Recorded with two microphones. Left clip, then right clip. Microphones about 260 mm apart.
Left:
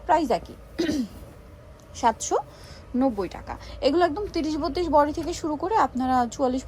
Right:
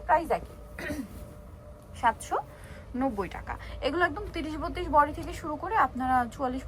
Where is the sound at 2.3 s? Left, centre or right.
Left.